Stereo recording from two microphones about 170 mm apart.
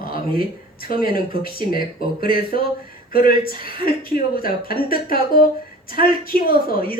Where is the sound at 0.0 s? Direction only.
60° left (ahead or behind).